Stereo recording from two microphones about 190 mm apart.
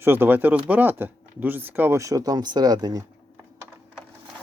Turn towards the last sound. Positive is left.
turn(degrees=-20)  # may be behind; listen again after turning